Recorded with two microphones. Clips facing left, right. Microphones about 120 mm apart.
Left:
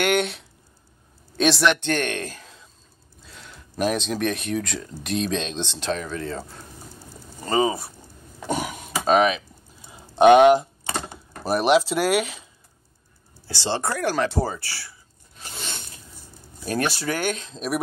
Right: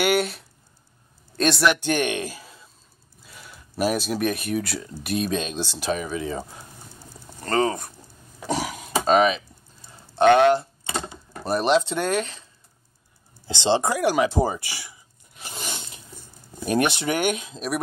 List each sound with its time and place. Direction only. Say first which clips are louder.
0.0 s a man's voice: even; 5° right (ahead or behind)
7.3 s speech: left 1 dB; 5° left (ahead or behind)
8.4 s throat clearing: even; centre (ahead or behind)
9.8 s a sound: left 3 dB; 15° left (ahead or behind)
11.4 s speech: left 2 dB; 5° left (ahead or behind)
13.5 s a sound: right 5 dB; 20° right (ahead or behind)
16.6 s speech: right 3 dB; 20° right (ahead or behind)